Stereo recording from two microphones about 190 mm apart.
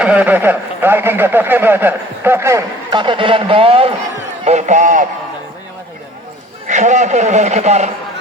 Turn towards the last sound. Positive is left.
turn(degrees=-35)  # may be behind; listen again after turning